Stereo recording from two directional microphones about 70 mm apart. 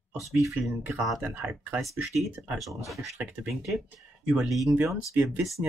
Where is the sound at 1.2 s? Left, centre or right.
Right.